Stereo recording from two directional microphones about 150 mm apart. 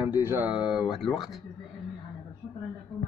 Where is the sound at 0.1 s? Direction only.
15° right (ahead or behind).